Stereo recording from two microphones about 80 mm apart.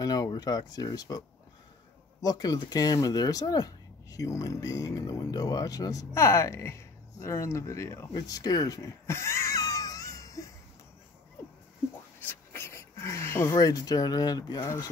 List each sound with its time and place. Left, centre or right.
0.0 s speech: left
2.2 s speech: left
6.1 s speech: left
8.1 s speech: left
9.0 s wheeze: left
12.2 s a sound: left
13.6 s speech: left
14.6 s speech: left